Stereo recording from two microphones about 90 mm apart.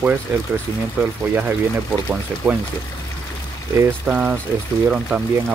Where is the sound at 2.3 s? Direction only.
20° right (ahead or behind).